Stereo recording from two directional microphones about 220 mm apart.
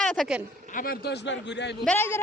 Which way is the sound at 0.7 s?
45° left (ahead or behind).